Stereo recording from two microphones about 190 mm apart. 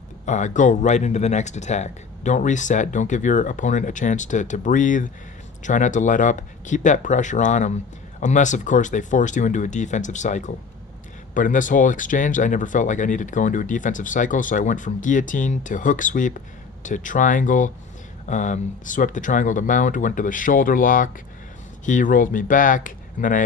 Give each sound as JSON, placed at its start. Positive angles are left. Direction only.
{"t": 0.3, "sound": "speech", "side_deg": 40}